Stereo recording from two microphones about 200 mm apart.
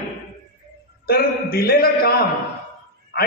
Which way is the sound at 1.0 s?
50° left (ahead or behind).